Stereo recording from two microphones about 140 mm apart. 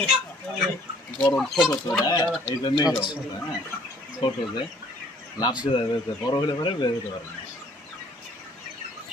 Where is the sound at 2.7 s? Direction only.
30° left (ahead or behind).